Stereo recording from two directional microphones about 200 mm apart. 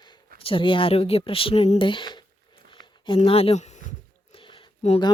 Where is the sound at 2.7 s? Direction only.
25° left (ahead or behind).